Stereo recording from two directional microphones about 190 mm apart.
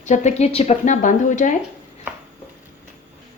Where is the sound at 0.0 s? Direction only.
40° left (ahead or behind).